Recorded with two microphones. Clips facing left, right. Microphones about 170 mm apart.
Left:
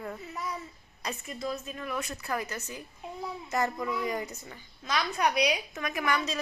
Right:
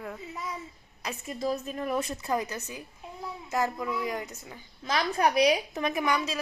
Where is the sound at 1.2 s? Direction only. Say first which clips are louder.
Right 7 dB; 35° right (ahead or behind); by 4.6 s centre (ahead or behind).